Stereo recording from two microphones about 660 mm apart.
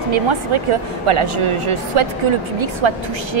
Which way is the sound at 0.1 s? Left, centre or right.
Right.